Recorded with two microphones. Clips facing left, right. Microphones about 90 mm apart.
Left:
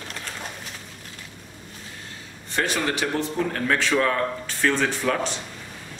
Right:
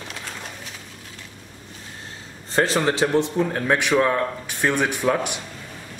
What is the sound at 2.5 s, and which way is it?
A man's voice, 30° right (ahead or behind).